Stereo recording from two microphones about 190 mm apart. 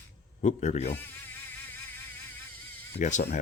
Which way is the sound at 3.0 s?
40° left (ahead or behind).